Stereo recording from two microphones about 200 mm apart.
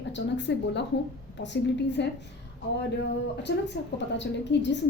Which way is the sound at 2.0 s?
60° left (ahead or behind).